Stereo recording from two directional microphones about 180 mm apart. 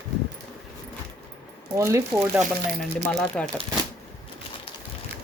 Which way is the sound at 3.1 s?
5° left (ahead or behind).